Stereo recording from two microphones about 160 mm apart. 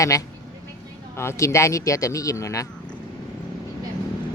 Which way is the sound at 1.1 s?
15° left (ahead or behind).